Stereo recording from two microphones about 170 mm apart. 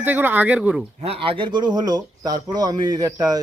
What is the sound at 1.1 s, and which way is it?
Speech, 30° right (ahead or behind).